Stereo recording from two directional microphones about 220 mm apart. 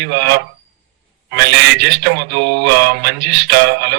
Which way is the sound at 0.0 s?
50° right (ahead or behind).